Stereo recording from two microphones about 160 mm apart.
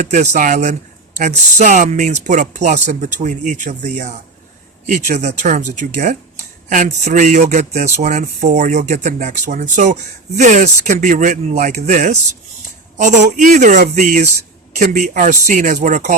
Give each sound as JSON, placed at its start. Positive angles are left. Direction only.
{"t": 0.0, "sound": "speech", "side_deg": -50}